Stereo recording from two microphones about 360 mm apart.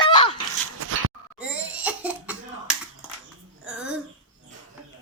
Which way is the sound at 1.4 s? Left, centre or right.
Centre.